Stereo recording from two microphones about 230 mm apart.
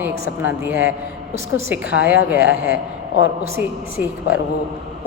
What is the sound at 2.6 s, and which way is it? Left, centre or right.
Speech, left.